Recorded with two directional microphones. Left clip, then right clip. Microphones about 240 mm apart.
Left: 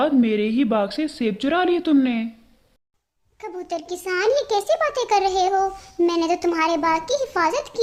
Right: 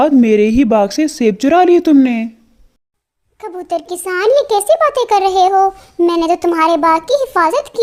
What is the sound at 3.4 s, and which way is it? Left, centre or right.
A child's voice, centre.